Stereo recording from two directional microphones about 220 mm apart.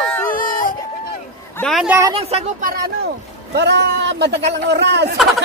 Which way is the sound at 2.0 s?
25° right (ahead or behind).